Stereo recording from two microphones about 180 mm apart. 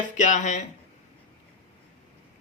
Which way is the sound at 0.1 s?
45° left (ahead or behind).